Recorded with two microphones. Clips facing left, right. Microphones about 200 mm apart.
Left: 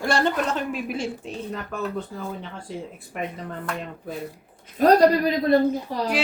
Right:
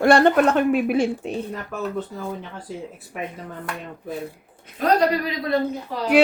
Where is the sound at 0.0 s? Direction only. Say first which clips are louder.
Right 8 dB; 60° right (ahead or behind).